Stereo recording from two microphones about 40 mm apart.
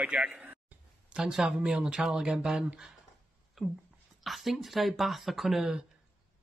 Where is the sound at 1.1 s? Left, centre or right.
Centre.